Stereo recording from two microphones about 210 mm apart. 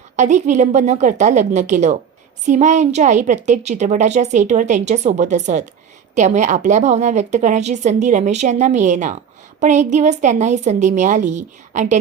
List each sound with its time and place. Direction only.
0.2 s a woman's voice: 35° right (ahead or behind)